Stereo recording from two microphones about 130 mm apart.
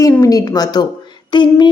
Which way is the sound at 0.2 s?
25° left (ahead or behind).